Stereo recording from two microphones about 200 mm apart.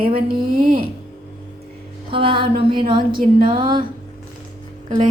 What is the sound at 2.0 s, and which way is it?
A woman's voice, 25° right (ahead or behind).